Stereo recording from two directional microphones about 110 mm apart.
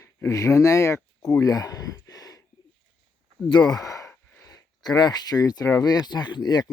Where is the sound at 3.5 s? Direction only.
40° left (ahead or behind).